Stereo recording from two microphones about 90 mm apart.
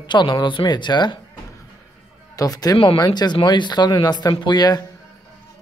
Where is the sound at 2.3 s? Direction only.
45° left (ahead or behind).